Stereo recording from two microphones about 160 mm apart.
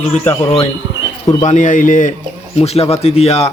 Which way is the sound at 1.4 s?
50° left (ahead or behind).